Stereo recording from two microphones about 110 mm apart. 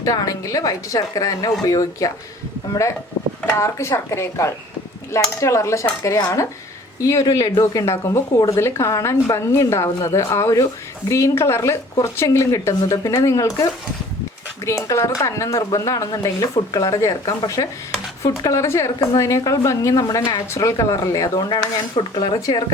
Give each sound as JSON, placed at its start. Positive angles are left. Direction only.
{"t": 0.0, "sound": "speech", "side_deg": 30}
{"t": 3.6, "sound": "a woman's voice", "side_deg": 25}
{"t": 21.5, "sound": "speech", "side_deg": 40}